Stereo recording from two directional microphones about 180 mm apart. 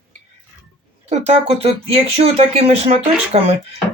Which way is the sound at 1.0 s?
35° right (ahead or behind).